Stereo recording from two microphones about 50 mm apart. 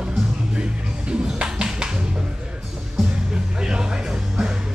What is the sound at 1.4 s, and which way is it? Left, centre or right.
Music, centre.